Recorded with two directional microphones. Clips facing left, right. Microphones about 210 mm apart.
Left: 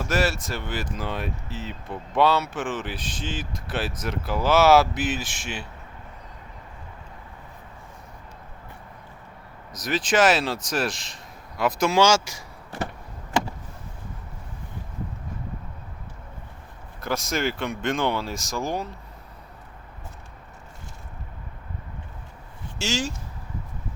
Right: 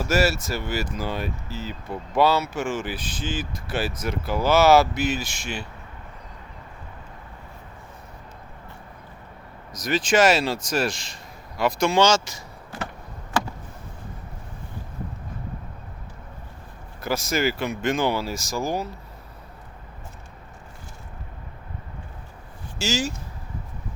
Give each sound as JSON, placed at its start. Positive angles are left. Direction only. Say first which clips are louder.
{"t": 0.0, "sound": "speech", "louder": "right 3 dB", "side_deg": -5}
{"t": 9.7, "sound": "speech", "louder": "right 2 dB", "side_deg": 0}
{"t": 17.0, "sound": "speech", "louder": "right 2 dB", "side_deg": -5}
{"t": 22.8, "sound": "speech", "louder": "right 2 dB", "side_deg": -5}